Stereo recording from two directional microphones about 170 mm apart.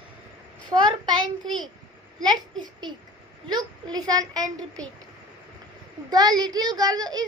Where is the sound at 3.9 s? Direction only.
20° right (ahead or behind).